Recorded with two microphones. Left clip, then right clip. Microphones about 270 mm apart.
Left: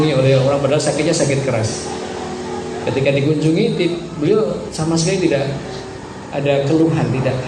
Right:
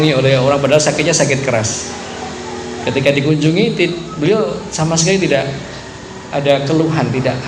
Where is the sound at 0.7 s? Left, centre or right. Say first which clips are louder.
Right 4 dB; right.